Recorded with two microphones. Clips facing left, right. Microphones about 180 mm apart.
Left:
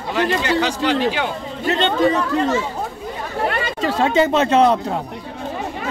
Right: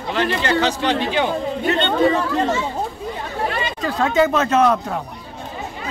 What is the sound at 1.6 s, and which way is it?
Speech, 40° left (ahead or behind).